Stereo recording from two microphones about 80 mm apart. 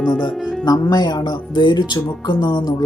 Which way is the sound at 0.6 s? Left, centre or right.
Left.